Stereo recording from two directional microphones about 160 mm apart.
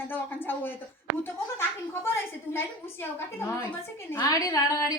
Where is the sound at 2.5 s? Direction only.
15° left (ahead or behind).